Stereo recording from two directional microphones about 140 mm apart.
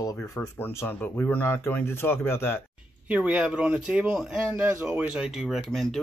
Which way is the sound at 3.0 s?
10° right (ahead or behind).